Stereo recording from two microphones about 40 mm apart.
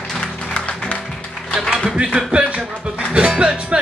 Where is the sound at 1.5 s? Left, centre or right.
Centre.